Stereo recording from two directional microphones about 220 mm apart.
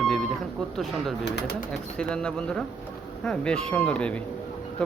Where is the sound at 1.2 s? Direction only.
50° left (ahead or behind).